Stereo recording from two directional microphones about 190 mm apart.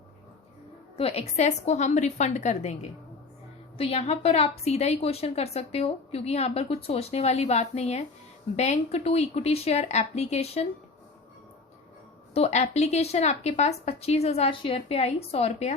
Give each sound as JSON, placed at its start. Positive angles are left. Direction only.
{"t": 0.9, "sound": "a woman's voice", "side_deg": 30}
{"t": 12.3, "sound": "a woman's voice", "side_deg": 35}